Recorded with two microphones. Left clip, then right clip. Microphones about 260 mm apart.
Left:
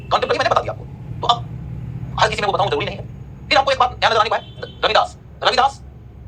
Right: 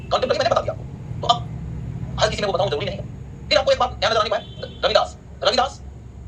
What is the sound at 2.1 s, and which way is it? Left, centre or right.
A man's voice, centre.